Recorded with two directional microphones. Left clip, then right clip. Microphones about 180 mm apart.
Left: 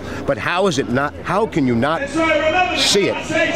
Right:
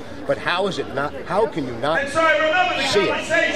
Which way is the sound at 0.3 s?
30° left (ahead or behind).